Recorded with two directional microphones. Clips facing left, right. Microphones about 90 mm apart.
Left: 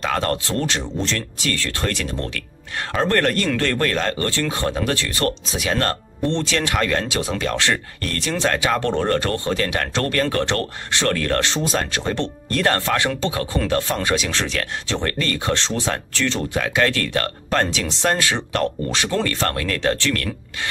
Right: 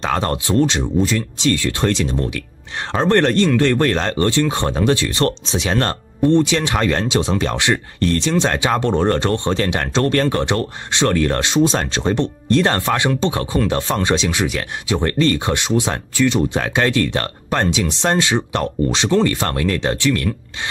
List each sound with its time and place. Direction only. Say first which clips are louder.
0.0 s speech: right 2 dB; 25° right (ahead or behind)
14.3 s speech: right 3 dB; 15° right (ahead or behind)